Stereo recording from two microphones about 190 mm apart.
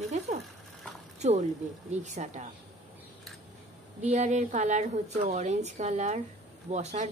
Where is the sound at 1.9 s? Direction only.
35° right (ahead or behind).